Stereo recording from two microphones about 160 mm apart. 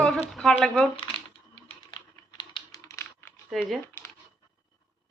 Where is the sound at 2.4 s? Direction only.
30° left (ahead or behind).